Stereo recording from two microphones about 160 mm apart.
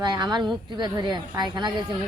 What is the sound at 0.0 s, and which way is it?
Speech, 25° right (ahead or behind).